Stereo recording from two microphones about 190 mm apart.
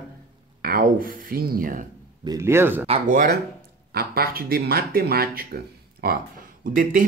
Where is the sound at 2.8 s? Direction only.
35° right (ahead or behind).